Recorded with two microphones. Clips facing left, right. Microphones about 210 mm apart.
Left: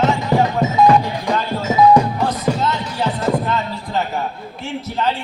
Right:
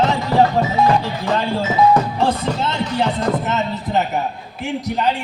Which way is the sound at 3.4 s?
20° right (ahead or behind).